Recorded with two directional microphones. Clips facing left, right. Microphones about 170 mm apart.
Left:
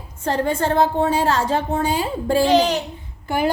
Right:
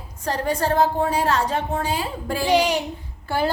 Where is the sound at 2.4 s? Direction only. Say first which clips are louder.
Left 1 dB; 10° right (ahead or behind).